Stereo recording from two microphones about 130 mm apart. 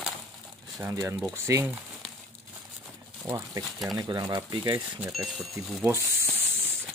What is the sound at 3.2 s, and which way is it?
Speech, 20° right (ahead or behind).